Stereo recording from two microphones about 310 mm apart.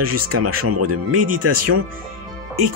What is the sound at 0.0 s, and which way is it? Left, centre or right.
Speech, right.